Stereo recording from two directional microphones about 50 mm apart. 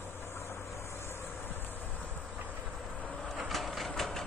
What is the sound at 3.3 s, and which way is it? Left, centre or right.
Train, centre.